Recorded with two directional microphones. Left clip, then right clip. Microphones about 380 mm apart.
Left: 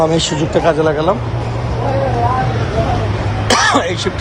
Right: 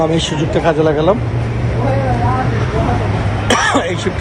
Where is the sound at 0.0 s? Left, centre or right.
Centre.